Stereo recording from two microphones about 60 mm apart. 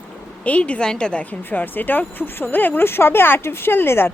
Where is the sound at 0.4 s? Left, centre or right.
Left.